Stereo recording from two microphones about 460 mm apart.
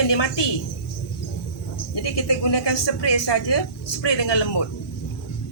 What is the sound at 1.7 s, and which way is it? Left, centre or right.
Speech, left.